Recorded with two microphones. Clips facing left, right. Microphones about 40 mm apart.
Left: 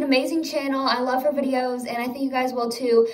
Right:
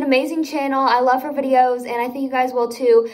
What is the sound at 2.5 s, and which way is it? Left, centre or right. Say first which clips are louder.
Speech: right 5 dB; right.